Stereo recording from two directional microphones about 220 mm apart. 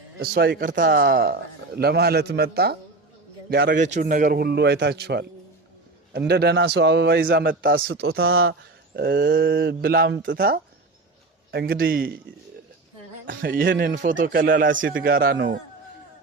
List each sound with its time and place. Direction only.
0.2 s a man's voice: 45° right (ahead or behind)
3.8 s a man's voice: 35° right (ahead or behind)
7.9 s speech: 65° right (ahead or behind)
9.0 s a man's voice: 45° right (ahead or behind)
13.2 s speech: 40° right (ahead or behind)
14.8 s a man's voice: 55° right (ahead or behind)